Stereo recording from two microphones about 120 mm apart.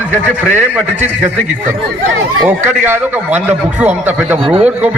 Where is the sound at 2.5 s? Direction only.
15° right (ahead or behind).